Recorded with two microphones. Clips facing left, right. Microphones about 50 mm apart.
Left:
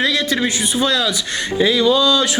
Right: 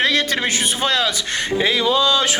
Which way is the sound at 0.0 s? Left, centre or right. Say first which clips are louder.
Left 1 dB; right.